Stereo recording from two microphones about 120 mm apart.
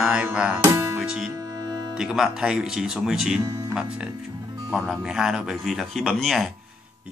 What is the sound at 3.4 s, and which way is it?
Speech, 30° right (ahead or behind).